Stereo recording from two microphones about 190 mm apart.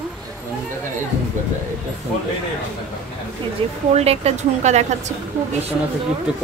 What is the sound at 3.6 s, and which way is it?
Speech, 30° right (ahead or behind).